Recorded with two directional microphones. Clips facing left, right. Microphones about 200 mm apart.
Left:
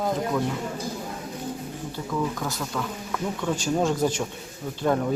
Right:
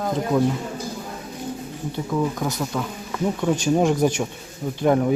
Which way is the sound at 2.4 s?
15° right (ahead or behind).